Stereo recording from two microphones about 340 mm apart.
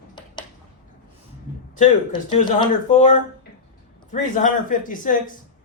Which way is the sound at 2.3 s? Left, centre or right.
Centre.